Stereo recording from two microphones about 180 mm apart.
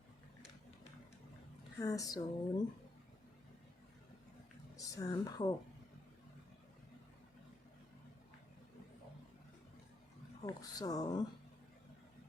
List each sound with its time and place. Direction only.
1.8 s speech: 20° left (ahead or behind)
4.8 s speech: 20° left (ahead or behind)
10.4 s speech: 20° left (ahead or behind)